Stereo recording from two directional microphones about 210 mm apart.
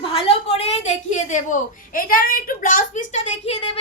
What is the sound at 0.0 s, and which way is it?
A woman's voice, 25° left (ahead or behind).